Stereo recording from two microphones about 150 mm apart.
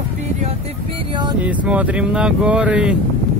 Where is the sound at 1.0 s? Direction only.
30° right (ahead or behind).